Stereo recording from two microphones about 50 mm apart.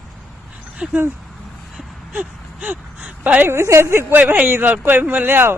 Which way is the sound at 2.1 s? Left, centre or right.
Right.